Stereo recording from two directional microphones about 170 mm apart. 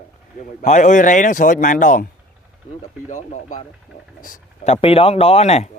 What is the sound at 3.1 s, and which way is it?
Speech, 45° left (ahead or behind).